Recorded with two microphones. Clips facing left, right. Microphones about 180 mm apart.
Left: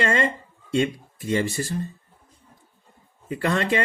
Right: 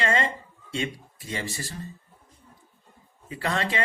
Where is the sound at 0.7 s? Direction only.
55° left (ahead or behind).